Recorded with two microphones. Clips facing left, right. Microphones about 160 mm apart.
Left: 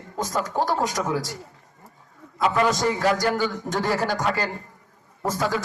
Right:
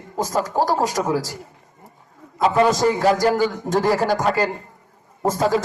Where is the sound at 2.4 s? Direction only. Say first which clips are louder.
Right 5 dB; 30° right (ahead or behind).